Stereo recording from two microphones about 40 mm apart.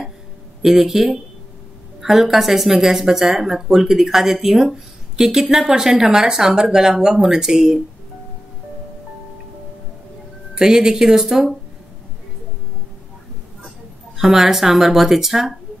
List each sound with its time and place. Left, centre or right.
0.7 s speech: centre
10.5 s speech: centre
11.2 s speech: centre
14.1 s speech: centre